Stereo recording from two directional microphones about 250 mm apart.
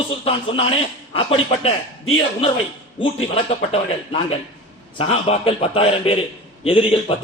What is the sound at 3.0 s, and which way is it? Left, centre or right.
A man's voice, left.